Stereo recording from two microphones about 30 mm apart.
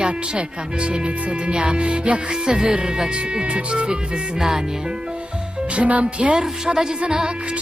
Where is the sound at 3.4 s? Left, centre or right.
Right.